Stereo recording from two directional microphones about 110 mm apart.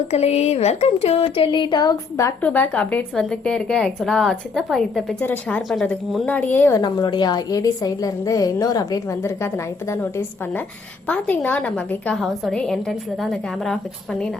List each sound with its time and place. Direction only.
0.1 s speech: 75° left (ahead or behind); by 2.3 s 35° left (ahead or behind)
2.4 s a woman's voice: 15° left (ahead or behind)
5.2 s a woman's voice: 15° left (ahead or behind)
6.7 s a woman's voice: 35° left (ahead or behind); by 12.1 s 10° left (ahead or behind)
12.1 s a woman's voice: centre (ahead or behind)